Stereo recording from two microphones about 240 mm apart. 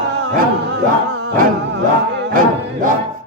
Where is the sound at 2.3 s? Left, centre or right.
Right.